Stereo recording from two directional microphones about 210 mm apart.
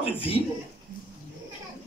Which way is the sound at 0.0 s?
25° left (ahead or behind).